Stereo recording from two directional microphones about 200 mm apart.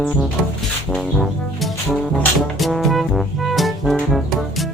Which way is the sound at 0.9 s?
Centre (ahead or behind).